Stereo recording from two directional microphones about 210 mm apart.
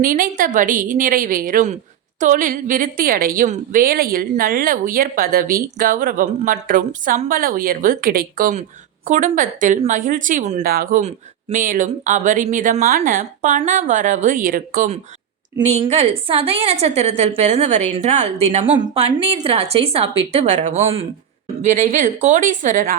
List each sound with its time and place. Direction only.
0.0 s a woman's voice: 40° right (ahead or behind)
15.6 s a woman's voice: 30° right (ahead or behind)